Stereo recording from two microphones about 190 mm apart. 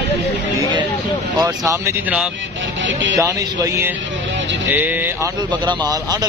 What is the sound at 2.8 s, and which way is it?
Speech, 75° right (ahead or behind).